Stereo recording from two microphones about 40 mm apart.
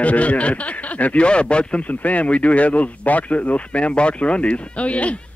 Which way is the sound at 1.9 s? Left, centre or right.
Left.